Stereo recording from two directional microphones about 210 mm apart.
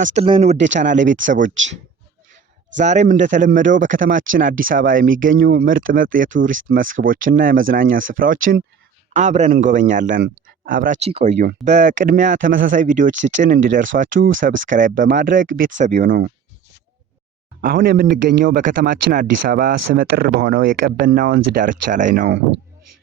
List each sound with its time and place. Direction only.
0.1 s speech: 25° right (ahead or behind)
0.5 s speech: 60° right (ahead or behind)
2.7 s speech: 35° right (ahead or behind)
17.6 s speech: 45° right (ahead or behind)